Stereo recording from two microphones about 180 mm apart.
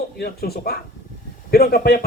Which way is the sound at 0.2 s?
60° left (ahead or behind).